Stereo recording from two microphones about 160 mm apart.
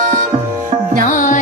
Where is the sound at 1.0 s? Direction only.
55° left (ahead or behind).